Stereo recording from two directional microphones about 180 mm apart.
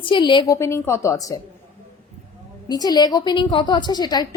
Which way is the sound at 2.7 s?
20° left (ahead or behind).